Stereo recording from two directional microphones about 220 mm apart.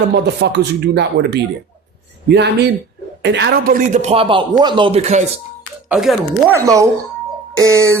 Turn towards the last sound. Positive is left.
turn(degrees=-15)  # may be behind; listen again after turning